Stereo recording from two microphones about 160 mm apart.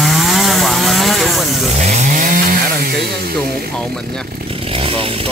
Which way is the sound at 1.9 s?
50° right (ahead or behind).